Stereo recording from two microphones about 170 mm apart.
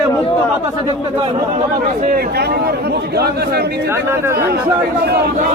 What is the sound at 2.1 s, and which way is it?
A man's voice, 65° right (ahead or behind).